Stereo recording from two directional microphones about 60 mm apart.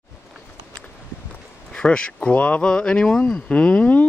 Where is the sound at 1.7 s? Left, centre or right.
Centre.